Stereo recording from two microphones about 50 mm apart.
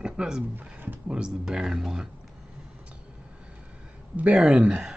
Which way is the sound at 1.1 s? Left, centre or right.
Centre.